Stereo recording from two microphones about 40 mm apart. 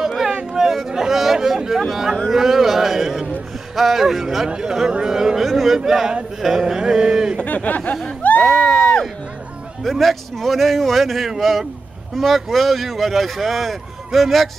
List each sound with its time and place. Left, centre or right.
0.5 s a sound: centre
1.7 s speech: centre
4.5 s speech: centre
7.4 s speech: left
8.4 s speech: centre